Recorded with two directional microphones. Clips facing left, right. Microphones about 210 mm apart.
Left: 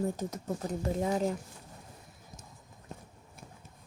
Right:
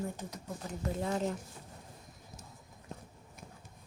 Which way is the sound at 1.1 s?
10° left (ahead or behind).